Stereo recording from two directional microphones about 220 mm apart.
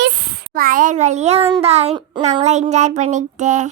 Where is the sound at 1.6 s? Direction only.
30° right (ahead or behind).